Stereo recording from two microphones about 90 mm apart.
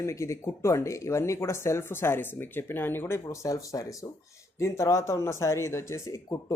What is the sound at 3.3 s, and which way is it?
Speech, 35° left (ahead or behind).